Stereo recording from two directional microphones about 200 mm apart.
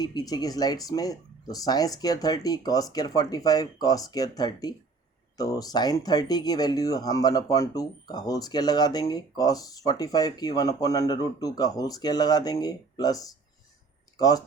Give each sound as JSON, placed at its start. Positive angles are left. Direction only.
{"t": 0.0, "sound": "speech", "side_deg": 20}